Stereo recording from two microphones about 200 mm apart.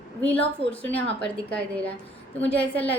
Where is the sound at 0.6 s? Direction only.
30° left (ahead or behind).